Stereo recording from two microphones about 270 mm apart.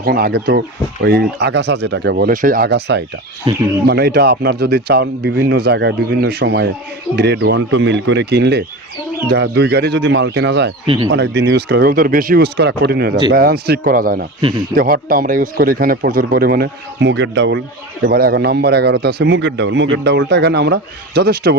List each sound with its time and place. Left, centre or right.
0.0 s a man's voice: right
3.5 s speech: centre
3.8 s a man's voice: right
10.8 s speech: centre
11.1 s a man's voice: right